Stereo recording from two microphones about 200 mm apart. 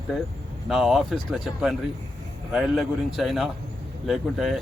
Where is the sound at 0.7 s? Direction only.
Centre (ahead or behind).